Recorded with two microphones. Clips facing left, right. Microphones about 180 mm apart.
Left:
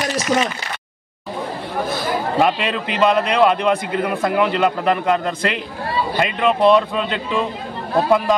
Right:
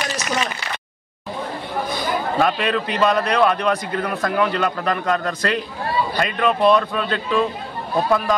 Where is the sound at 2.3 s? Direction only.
20° left (ahead or behind).